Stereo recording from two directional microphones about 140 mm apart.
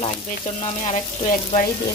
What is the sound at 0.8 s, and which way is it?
Frying, 55° left (ahead or behind).